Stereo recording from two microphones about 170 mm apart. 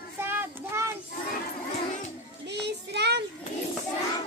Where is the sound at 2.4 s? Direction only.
90° right.